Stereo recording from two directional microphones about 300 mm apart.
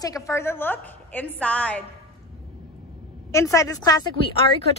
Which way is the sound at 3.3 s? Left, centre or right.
Centre.